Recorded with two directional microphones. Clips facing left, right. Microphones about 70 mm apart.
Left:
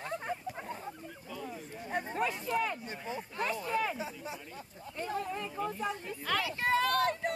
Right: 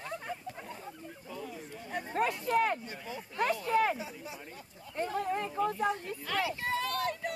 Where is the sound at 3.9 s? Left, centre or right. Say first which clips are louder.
Left 2 dB; left.